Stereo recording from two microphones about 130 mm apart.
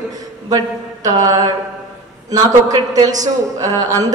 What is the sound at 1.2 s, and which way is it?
A man's voice, 30° right (ahead or behind).